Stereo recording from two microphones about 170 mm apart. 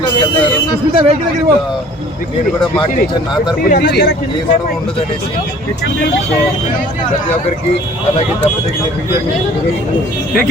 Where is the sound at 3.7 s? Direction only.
60° left (ahead or behind).